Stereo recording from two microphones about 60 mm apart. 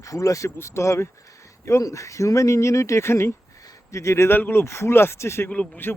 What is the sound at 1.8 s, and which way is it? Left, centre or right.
Speech, left.